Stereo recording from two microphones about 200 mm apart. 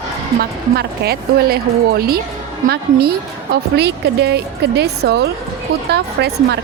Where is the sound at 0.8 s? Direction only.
50° right (ahead or behind).